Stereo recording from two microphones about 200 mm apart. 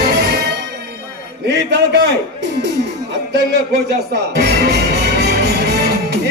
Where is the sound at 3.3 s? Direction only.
55° right (ahead or behind).